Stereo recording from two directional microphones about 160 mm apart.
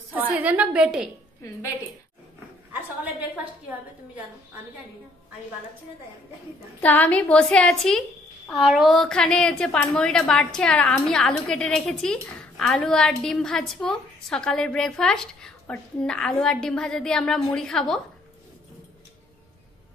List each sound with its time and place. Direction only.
0.3 s a woman's voice: 10° right (ahead or behind)
3.0 s a woman's voice: 10° right (ahead or behind)
6.8 s a woman's voice: 10° left (ahead or behind)